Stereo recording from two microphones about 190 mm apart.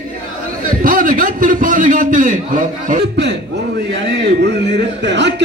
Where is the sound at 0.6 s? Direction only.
45° right (ahead or behind).